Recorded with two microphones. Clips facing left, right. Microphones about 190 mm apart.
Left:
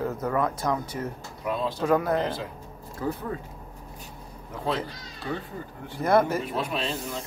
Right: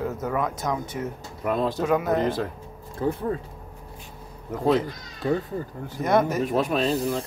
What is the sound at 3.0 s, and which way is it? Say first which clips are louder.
Speech: right 4 dB; 25° right (ahead or behind).